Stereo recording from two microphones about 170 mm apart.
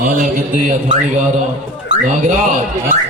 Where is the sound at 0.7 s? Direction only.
45° right (ahead or behind).